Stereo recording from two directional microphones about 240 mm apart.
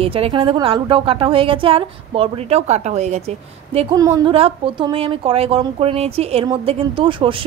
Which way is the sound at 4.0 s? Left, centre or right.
Centre.